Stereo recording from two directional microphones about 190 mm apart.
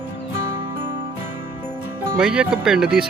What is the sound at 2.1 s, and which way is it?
Speech, 5° right (ahead or behind).